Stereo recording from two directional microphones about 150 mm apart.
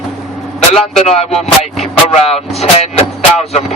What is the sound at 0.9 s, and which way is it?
Speech, 45° left (ahead or behind).